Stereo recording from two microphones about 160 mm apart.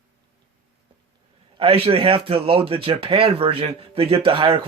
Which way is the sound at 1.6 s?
35° right (ahead or behind).